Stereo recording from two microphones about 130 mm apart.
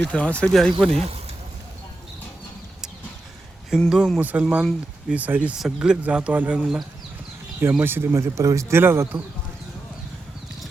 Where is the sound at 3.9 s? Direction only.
5° right (ahead or behind).